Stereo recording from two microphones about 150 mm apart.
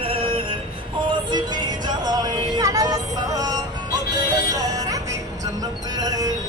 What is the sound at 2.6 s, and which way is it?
Music, 25° right (ahead or behind).